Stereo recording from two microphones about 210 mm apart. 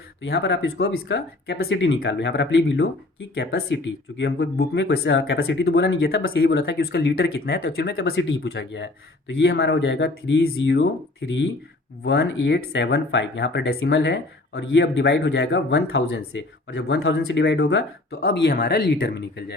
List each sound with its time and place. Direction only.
0.2 s speech: 55° left (ahead or behind)